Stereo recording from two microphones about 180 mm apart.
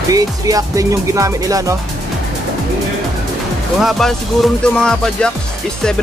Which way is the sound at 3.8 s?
Centre (ahead or behind).